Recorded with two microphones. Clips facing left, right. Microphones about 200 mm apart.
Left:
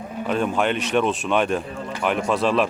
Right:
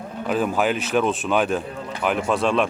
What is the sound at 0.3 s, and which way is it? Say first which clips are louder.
A man's voice: right 1 dB; 5° right (ahead or behind).